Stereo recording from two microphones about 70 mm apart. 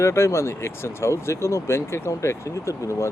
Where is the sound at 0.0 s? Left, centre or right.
Left.